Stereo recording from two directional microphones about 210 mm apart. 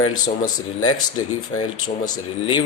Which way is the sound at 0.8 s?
85° left.